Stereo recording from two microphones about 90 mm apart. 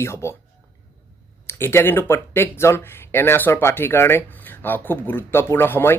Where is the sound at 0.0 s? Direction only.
30° left (ahead or behind).